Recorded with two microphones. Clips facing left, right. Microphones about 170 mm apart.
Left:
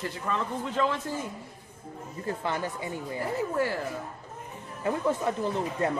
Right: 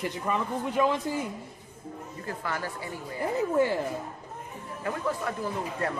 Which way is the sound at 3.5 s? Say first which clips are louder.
Right 5 dB; 20° right (ahead or behind).